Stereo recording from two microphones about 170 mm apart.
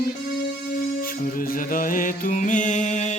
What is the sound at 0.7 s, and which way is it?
Music, 60° left (ahead or behind).